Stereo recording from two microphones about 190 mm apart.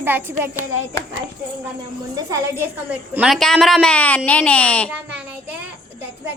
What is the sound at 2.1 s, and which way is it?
A woman's voice, 15° right (ahead or behind).